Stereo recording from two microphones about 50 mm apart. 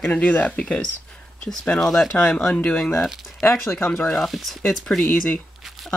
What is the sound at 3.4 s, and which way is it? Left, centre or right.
Speech, left.